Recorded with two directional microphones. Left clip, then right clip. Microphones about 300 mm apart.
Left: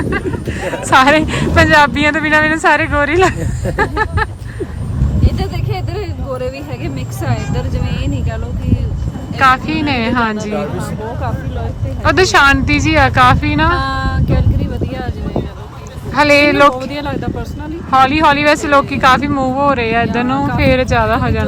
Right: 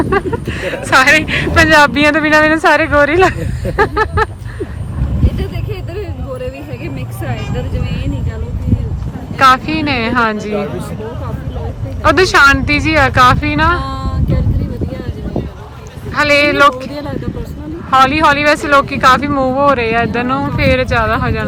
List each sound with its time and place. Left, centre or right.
0.0 s speech: centre
6.0 s speech: left
9.4 s speech: centre
12.0 s speech: centre
13.9 s a sound: centre
16.1 s speech: centre
16.9 s speech: centre
17.9 s speech: centre